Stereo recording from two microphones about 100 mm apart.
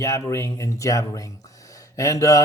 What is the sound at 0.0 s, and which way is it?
Speech, 30° left (ahead or behind).